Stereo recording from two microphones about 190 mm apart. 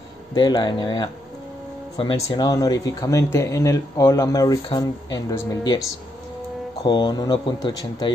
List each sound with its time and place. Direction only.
0.3 s speech: 20° left (ahead or behind)
6.8 s speech: 20° left (ahead or behind)